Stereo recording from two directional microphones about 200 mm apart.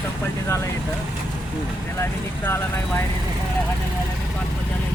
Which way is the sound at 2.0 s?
10° left (ahead or behind).